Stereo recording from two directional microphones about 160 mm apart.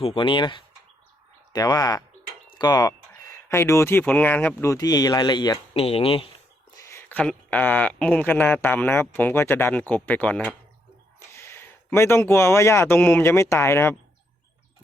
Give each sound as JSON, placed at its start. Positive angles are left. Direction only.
{"t": 0.0, "sound": "speech", "side_deg": 35}
{"t": 6.7, "sound": "speech", "side_deg": 15}